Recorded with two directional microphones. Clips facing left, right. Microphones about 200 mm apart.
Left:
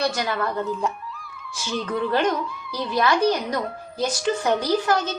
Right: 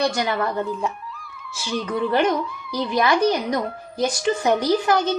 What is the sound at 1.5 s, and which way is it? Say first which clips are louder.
A woman's voice: right 1 dB; 5° right (ahead or behind).